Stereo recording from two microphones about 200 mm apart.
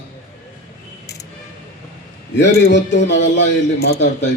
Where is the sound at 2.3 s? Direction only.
60° left (ahead or behind).